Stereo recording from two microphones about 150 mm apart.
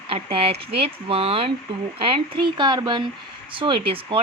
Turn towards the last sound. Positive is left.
turn(degrees=-35)  # may be behind; listen again after turning